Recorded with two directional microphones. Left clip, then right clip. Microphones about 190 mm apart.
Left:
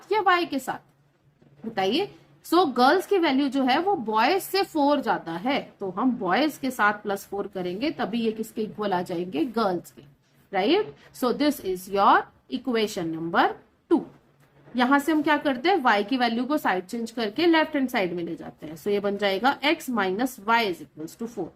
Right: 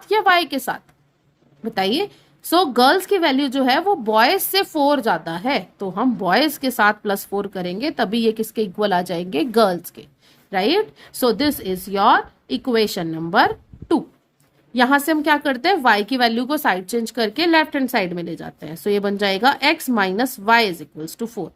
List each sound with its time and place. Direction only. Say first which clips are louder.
0.1 s a woman's voice: right 6 dB; 50° right (ahead or behind)